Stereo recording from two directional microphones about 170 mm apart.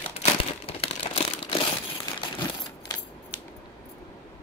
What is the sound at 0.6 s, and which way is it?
Crumpling, 30° left (ahead or behind).